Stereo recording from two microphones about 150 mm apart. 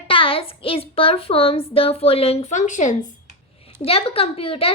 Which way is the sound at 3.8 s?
40° left (ahead or behind).